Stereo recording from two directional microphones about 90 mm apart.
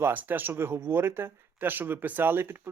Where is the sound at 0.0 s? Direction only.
20° right (ahead or behind).